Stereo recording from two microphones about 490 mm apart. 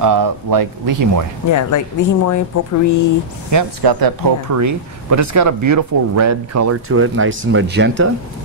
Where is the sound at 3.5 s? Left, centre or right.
Right.